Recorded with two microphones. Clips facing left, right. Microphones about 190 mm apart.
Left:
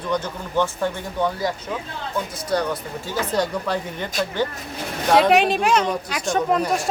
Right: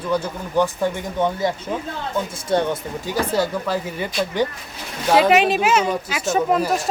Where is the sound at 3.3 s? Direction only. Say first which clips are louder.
Even; 5° right (ahead or behind).